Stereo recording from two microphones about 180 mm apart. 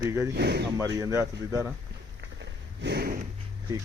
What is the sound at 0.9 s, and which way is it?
Speech, 20° right (ahead or behind).